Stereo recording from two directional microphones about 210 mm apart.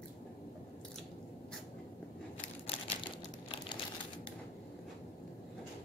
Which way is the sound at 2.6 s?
25° left (ahead or behind).